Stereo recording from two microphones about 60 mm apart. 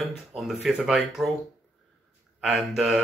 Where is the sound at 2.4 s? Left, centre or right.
Centre.